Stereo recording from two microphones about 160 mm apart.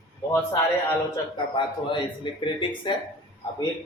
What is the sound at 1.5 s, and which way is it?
Speech, 30° left (ahead or behind).